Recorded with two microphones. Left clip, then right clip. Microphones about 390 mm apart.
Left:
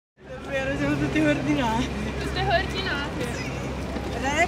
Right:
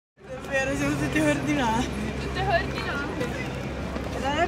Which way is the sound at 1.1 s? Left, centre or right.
Right.